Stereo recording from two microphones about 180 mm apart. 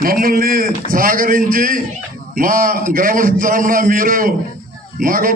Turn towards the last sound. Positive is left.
turn(degrees=-50)  # may be behind; listen again after turning